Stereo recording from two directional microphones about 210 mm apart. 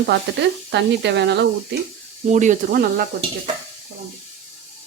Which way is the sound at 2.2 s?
35° right (ahead or behind).